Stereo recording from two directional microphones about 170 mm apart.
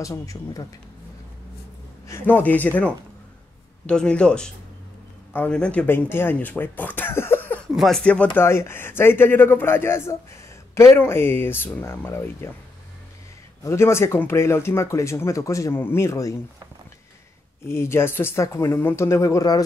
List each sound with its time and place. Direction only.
0.0 s speech: 20° left (ahead or behind)
2.0 s speech: 15° left (ahead or behind)
13.7 s speech: 15° left (ahead or behind)
17.6 s speech: 15° left (ahead or behind)